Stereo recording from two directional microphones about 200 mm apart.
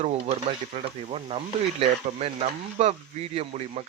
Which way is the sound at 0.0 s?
30° right (ahead or behind).